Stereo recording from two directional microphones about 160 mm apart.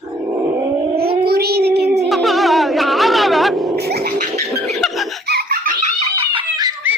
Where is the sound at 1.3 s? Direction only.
80° right.